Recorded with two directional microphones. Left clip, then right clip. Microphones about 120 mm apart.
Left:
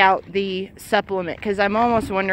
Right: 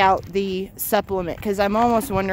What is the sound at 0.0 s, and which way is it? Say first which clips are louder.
Speech: left 1 dB; 45° right (ahead or behind).